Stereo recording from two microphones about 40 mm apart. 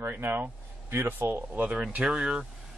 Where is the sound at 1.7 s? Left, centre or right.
Right.